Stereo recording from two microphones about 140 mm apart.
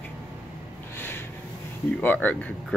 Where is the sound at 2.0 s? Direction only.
10° left (ahead or behind).